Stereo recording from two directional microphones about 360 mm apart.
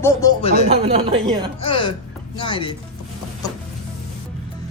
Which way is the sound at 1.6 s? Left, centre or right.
Centre.